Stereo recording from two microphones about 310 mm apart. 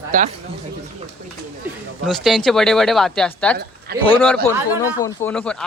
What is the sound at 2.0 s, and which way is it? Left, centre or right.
Speech, centre.